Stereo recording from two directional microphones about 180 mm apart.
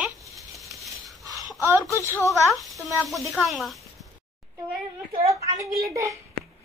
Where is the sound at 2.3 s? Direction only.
Centre (ahead or behind).